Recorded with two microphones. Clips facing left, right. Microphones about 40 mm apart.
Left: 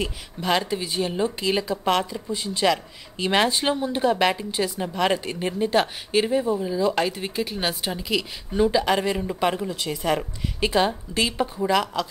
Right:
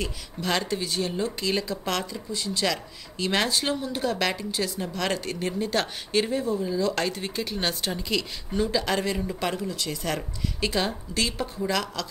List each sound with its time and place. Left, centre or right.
0.0 s speech: centre